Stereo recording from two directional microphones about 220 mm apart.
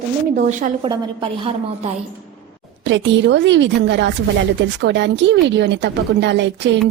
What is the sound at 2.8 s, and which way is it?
A woman's voice, 55° right (ahead or behind).